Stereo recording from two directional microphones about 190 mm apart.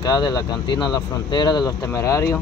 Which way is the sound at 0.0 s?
20° left (ahead or behind).